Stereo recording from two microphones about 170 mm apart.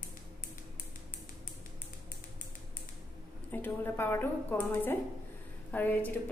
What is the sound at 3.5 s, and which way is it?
A woman's voice, 10° left (ahead or behind).